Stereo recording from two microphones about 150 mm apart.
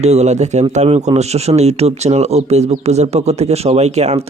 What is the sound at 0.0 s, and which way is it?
Speech, 45° right (ahead or behind).